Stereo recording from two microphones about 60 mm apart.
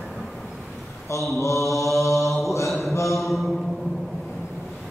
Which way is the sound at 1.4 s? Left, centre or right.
Left.